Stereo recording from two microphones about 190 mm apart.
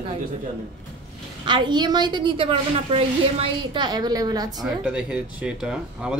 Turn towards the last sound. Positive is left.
turn(degrees=-5)  # may be behind; listen again after turning